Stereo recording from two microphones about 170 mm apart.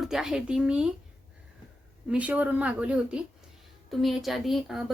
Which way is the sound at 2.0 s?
10° right (ahead or behind).